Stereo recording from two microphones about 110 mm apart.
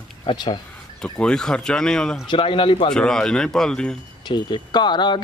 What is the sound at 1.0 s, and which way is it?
Speech, 10° left (ahead or behind).